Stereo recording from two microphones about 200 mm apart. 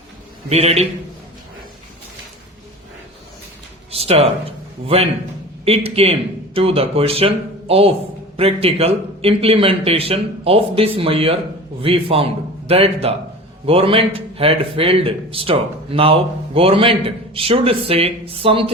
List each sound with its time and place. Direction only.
0.5 s a man's voice: 30° right (ahead or behind)
3.9 s speech: 30° right (ahead or behind)
5.6 s a man's voice: 30° right (ahead or behind)